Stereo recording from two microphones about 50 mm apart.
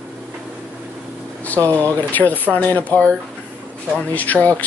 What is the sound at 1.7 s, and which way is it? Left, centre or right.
Speech, left.